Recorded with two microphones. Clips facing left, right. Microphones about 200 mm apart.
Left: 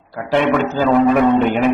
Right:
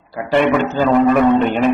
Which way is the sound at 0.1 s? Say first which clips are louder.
Right 1 dB; centre (ahead or behind).